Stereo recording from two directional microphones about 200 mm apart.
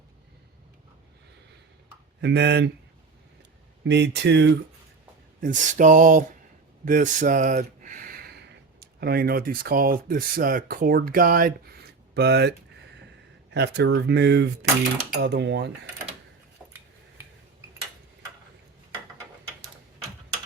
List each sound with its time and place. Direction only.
2.2 s speech: 60° right (ahead or behind)
3.8 s speech: 60° right (ahead or behind)
5.4 s a sound: 40° right (ahead or behind)
6.8 s speech: 40° right (ahead or behind); by 15.7 s 60° right (ahead or behind)